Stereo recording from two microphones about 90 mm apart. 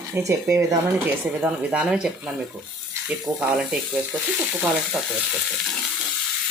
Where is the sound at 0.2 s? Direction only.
35° right (ahead or behind).